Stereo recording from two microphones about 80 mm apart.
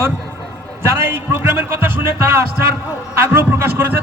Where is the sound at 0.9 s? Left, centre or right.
Right.